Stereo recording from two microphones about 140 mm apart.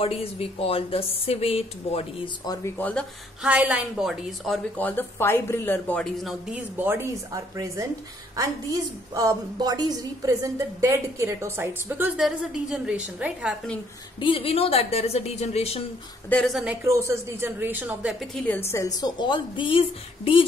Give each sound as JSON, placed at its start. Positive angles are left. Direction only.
{"t": 0.0, "sound": "a woman's voice", "side_deg": 45}
{"t": 2.4, "sound": "a woman's voice", "side_deg": 30}
{"t": 2.8, "sound": "speech", "side_deg": 10}
{"t": 3.4, "sound": "speech", "side_deg": -10}
{"t": 4.7, "sound": "speech", "side_deg": 15}
{"t": 6.1, "sound": "a woman's voice", "side_deg": 0}
{"t": 6.8, "sound": "a woman's voice", "side_deg": -15}
{"t": 12.2, "sound": "a woman's voice", "side_deg": -5}
{"t": 14.2, "sound": "a woman's voice", "side_deg": 40}
{"t": 16.3, "sound": "a woman's voice", "side_deg": 5}
{"t": 16.8, "sound": "speech", "side_deg": -20}
{"t": 18.2, "sound": "a woman's voice", "side_deg": 5}